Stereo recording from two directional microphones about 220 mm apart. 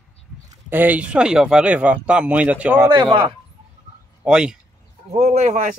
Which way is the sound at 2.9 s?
20° right (ahead or behind).